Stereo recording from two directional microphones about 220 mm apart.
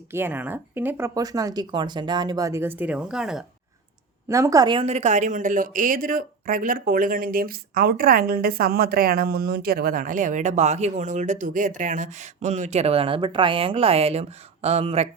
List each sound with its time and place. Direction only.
0.1 s speech: 10° right (ahead or behind)
4.3 s a woman's voice: 15° right (ahead or behind)